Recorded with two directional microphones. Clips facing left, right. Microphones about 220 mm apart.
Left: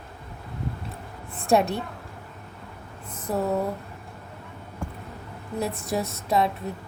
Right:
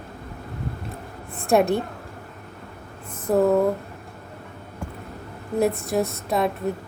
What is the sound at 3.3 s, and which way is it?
Speech, 50° right (ahead or behind).